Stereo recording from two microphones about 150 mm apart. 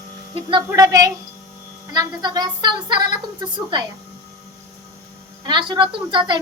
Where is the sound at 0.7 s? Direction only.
25° right (ahead or behind).